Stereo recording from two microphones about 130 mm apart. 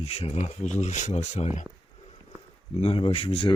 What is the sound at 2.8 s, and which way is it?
Speech, 50° left (ahead or behind).